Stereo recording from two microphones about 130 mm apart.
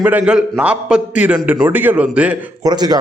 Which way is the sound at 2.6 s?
30° right (ahead or behind).